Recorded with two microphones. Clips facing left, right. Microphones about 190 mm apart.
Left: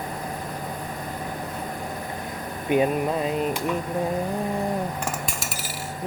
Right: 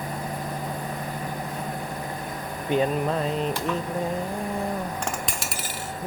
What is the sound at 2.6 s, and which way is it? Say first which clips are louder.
Speech: left 2 dB; 10° left (ahead or behind).